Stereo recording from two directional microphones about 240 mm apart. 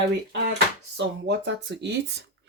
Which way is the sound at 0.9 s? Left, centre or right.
Right.